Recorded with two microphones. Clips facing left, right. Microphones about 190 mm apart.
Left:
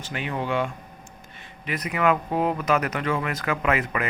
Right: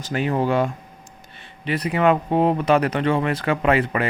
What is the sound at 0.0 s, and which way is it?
Speech, 40° right (ahead or behind).